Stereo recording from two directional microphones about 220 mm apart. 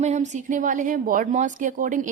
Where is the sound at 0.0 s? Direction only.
30° right (ahead or behind).